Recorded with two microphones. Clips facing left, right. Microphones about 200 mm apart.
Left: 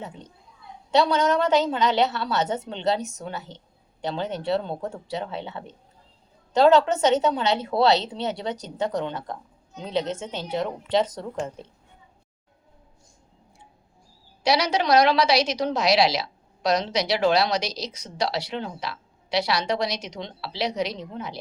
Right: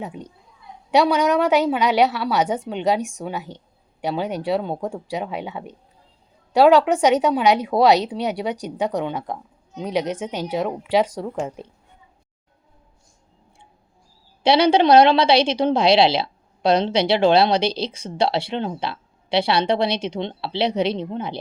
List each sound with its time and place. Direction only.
0.0 s speech: 15° right (ahead or behind)
14.4 s a woman's voice: 30° right (ahead or behind)